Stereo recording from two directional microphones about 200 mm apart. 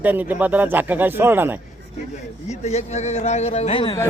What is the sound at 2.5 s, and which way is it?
A man's voice, 35° left (ahead or behind).